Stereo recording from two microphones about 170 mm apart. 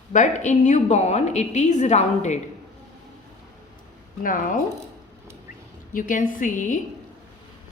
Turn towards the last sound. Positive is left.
turn(degrees=50)  # may be behind; listen again after turning